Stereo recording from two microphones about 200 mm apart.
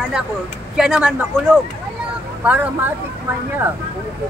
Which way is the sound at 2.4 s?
5° right (ahead or behind).